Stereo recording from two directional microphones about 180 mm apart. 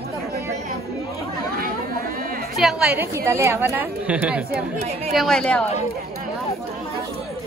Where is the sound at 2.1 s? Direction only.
55° right (ahead or behind).